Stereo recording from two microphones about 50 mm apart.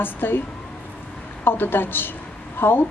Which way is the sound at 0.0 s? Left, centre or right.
Left.